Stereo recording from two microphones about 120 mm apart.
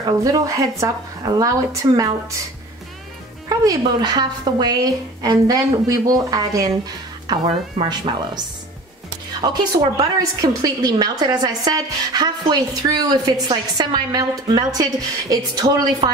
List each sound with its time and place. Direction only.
0.2 s a woman's voice: 30° right (ahead or behind)
3.4 s a woman's voice: 35° right (ahead or behind)
9.4 s a woman's voice: 35° right (ahead or behind)